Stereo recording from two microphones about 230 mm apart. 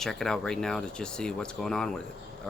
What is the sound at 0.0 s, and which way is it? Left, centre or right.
Speech, centre.